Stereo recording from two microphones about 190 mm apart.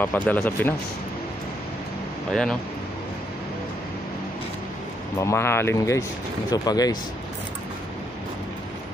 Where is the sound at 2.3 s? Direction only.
5° left (ahead or behind).